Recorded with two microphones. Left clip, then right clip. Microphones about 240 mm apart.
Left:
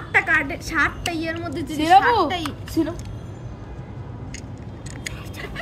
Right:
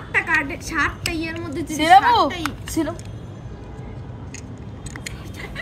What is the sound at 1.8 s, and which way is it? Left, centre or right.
A woman's voice, right.